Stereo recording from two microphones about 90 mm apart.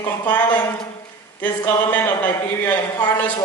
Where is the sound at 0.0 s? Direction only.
20° left (ahead or behind).